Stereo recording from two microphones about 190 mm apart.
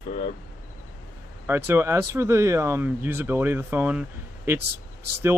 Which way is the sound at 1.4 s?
10° right (ahead or behind).